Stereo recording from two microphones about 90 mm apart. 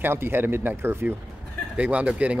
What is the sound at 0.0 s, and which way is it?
Speech, 25° right (ahead or behind).